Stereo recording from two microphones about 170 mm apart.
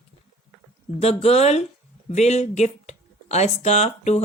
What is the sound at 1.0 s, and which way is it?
Speech, 35° left (ahead or behind).